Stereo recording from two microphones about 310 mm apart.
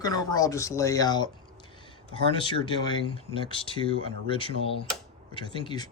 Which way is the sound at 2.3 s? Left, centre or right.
Centre.